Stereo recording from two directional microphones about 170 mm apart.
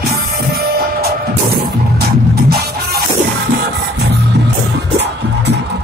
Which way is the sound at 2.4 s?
65° right (ahead or behind).